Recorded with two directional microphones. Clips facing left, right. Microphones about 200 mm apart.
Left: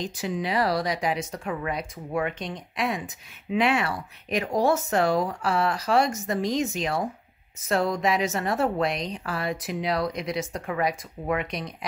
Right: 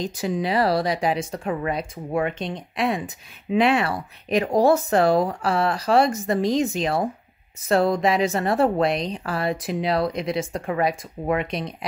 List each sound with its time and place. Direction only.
0.0 s a woman's voice: 40° right (ahead or behind)